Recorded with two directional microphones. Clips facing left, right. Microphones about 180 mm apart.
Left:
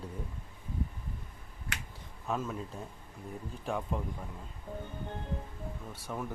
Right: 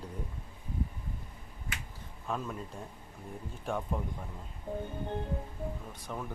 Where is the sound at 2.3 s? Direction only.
Centre (ahead or behind).